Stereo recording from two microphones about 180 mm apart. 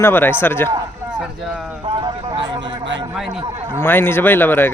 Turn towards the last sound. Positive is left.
turn(degrees=10)  # may be behind; listen again after turning